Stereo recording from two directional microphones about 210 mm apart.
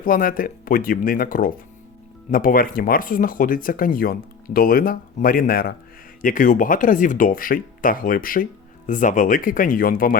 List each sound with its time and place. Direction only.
0.0 s speech: 40° left (ahead or behind)